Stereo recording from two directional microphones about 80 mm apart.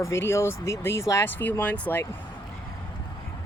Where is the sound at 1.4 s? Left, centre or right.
Left.